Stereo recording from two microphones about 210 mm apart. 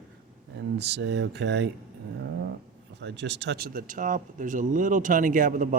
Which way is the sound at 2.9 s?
55° right (ahead or behind).